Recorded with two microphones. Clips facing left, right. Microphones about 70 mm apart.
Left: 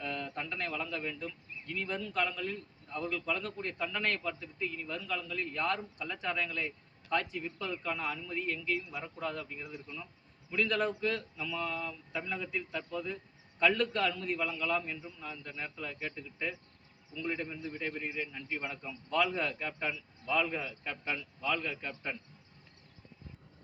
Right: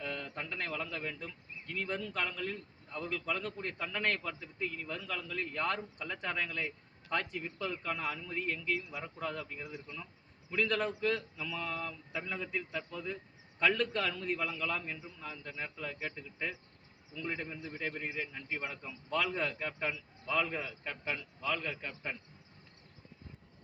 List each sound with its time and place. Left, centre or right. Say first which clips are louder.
0.0 s a man's voice: left 2 dB; right